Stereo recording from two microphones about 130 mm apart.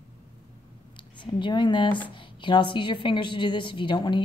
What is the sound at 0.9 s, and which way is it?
A woman's voice, 40° left (ahead or behind).